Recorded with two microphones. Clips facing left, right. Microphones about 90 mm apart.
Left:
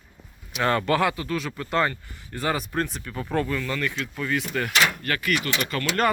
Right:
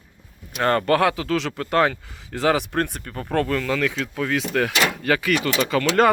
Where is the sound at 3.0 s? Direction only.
45° right (ahead or behind).